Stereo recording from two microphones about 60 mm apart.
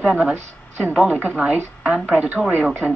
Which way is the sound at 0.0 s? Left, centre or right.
Right.